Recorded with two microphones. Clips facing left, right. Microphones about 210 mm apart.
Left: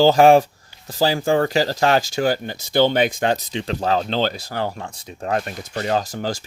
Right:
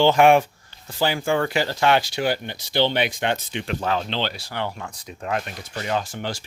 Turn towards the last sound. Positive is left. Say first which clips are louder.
# left 4 dB
turn(degrees=40)  # may be behind; listen again after turning